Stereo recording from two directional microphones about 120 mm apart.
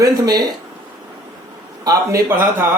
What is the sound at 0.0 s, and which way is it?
Speech, 35° right (ahead or behind).